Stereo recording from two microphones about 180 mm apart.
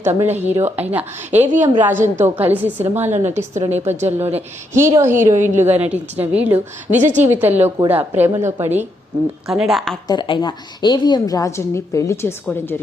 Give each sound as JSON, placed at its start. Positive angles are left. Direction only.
{"t": 0.0, "sound": "a woman's voice", "side_deg": -15}
{"t": 3.3, "sound": "a woman's voice", "side_deg": -40}
{"t": 4.7, "sound": "a woman's voice", "side_deg": -15}
{"t": 9.5, "sound": "speech", "side_deg": 0}
{"t": 10.1, "sound": "a woman's voice", "side_deg": 25}